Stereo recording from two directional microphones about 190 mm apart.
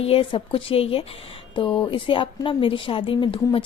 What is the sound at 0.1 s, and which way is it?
A woman's voice, 30° left (ahead or behind).